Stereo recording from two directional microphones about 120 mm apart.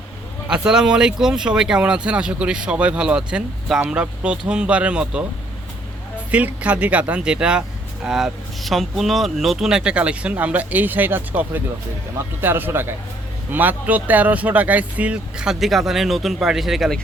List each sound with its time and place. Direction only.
0.4 s speech: 10° right (ahead or behind)
6.3 s speech: 10° right (ahead or behind)